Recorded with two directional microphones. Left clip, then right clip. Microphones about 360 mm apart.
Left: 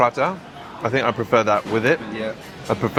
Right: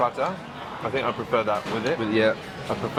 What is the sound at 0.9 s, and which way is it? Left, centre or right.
Speech, left.